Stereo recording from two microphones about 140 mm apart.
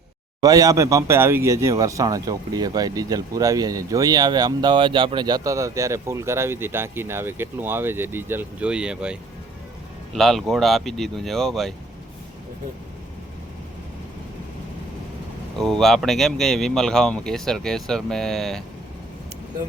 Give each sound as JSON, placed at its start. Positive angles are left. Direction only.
{"t": 0.4, "sound": "speech", "side_deg": -25}
{"t": 15.5, "sound": "speech", "side_deg": 5}